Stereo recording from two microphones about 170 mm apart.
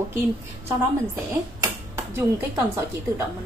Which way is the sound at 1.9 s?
15° right (ahead or behind).